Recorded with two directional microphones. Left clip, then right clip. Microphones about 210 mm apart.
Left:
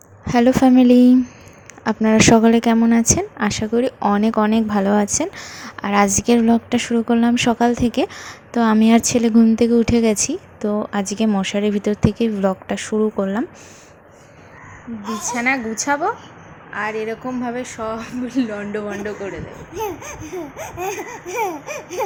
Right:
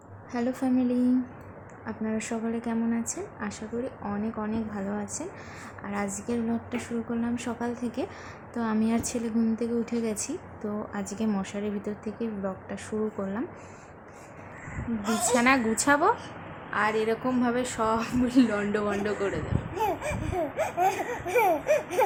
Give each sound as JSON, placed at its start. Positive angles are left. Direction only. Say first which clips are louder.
{"t": 0.3, "sound": "speech", "louder": "left 15 dB", "side_deg": 40}
{"t": 15.0, "sound": "a woman's voice", "louder": "left 2 dB", "side_deg": -15}
{"t": 15.3, "sound": "a woman's voice", "louder": "left 3 dB", "side_deg": 5}